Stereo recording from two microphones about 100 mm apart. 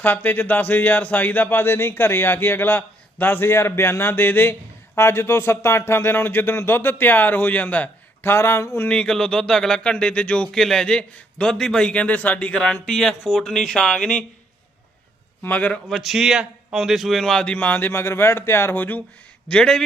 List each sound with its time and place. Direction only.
0.0 s speech: 20° left (ahead or behind)
8.9 s speech: 10° left (ahead or behind)
15.4 s speech: 15° left (ahead or behind)
15.9 s speech: centre (ahead or behind); by 19.0 s 20° left (ahead or behind)
19.5 s speech: 5° left (ahead or behind)